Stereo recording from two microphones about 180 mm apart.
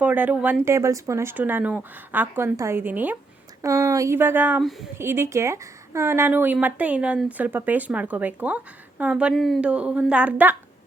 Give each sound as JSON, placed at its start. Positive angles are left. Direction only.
{"t": 0.0, "sound": "speech", "side_deg": -10}